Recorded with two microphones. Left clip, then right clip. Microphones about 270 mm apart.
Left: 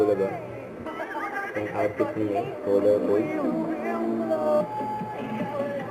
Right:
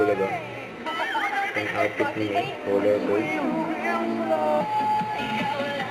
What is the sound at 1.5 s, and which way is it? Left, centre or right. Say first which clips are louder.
Speech: right 2 dB; centre.